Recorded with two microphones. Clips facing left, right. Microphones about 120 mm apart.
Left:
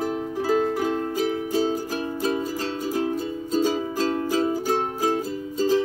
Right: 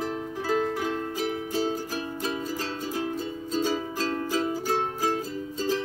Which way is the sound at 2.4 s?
10° left (ahead or behind).